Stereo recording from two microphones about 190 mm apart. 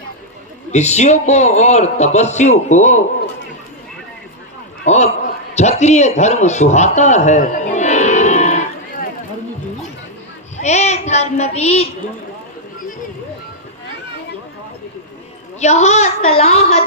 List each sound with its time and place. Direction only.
0.7 s a man's voice: 35° left (ahead or behind)
4.9 s a man's voice: 35° left (ahead or behind)
5.5 s a sound: 35° left (ahead or behind)
10.6 s child singing: 35° left (ahead or behind)
15.6 s a man's voice: 35° left (ahead or behind)